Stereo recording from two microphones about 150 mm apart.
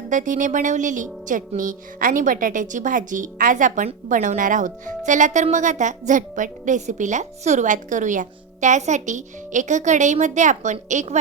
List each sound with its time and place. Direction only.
0.1 s speech: 60° right (ahead or behind)